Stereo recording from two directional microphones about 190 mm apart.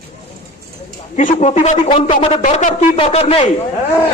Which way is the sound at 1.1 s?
35° left (ahead or behind).